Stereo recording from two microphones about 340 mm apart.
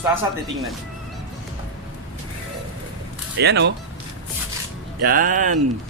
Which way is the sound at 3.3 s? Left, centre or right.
Right.